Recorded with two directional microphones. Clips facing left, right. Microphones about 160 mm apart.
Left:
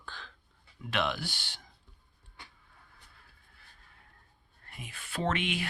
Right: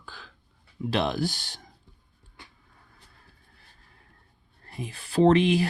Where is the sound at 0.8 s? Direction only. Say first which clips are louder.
Right 7 dB; 35° right (ahead or behind).